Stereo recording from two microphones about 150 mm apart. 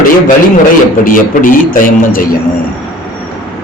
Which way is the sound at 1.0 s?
65° left (ahead or behind).